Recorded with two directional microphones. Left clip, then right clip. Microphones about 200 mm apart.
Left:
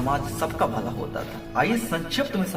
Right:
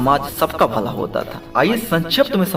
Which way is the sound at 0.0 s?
45° right (ahead or behind).